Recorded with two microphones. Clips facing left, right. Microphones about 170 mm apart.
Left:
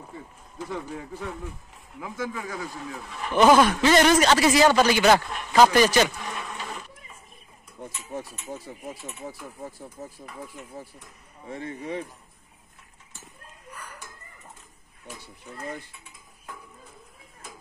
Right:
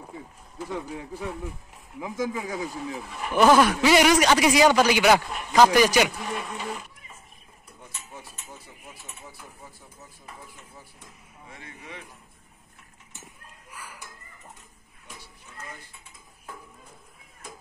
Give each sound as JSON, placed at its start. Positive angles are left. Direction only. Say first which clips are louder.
{"t": 0.1, "sound": "a man's voice", "louder": "even", "side_deg": -5}
{"t": 6.4, "sound": "printer", "louder": "right 3 dB", "side_deg": -5}
{"t": 10.0, "sound": "speech", "louder": "left 11 dB", "side_deg": 50}
{"t": 11.5, "sound": "speech", "louder": "left 12 dB", "side_deg": 45}
{"t": 13.7, "sound": "cat", "louder": "left 1 dB", "side_deg": -5}
{"t": 15.5, "sound": "dishes", "louder": "left 6 dB", "side_deg": 35}